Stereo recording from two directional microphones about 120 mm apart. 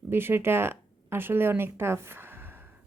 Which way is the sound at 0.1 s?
20° right (ahead or behind).